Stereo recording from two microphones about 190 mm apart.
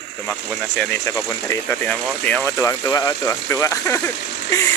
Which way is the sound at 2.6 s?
20° left (ahead or behind).